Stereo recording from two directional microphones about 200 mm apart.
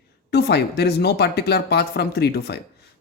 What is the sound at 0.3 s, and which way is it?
Speech, 55° left (ahead or behind).